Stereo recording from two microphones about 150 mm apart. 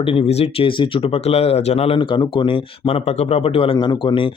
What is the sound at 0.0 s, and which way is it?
Speech, 40° left (ahead or behind).